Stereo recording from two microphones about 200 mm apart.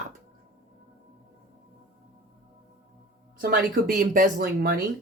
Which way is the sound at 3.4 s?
45° right (ahead or behind).